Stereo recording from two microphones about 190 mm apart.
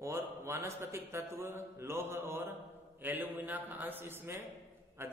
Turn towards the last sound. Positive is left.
turn(degrees=-10)  # may be behind; listen again after turning